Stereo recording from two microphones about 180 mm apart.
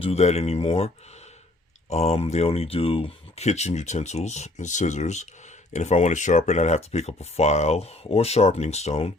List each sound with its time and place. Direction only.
0.0 s speech: 35° left (ahead or behind)
1.9 s speech: 35° left (ahead or behind)